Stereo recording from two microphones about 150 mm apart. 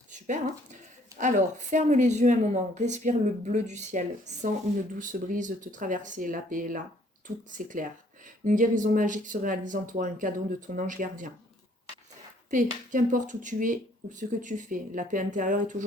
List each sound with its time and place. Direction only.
0.1 s speech: 55° right (ahead or behind)
12.5 s speech: 60° right (ahead or behind)